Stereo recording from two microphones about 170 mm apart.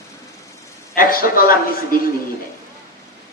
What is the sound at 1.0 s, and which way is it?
Speech, 55° left (ahead or behind).